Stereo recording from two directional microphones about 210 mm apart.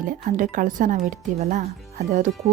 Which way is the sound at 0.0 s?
40° right (ahead or behind).